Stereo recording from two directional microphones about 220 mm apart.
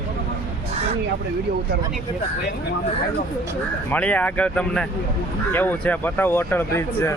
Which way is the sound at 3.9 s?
5° left (ahead or behind).